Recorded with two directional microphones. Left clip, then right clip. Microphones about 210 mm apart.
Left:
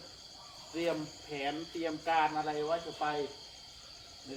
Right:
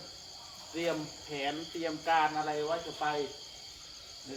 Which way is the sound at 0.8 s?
20° right (ahead or behind).